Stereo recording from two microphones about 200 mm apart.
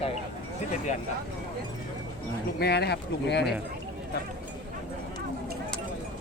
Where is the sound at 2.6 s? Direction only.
55° left (ahead or behind).